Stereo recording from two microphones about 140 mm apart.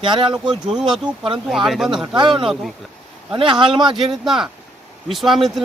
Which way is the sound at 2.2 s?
35° right (ahead or behind).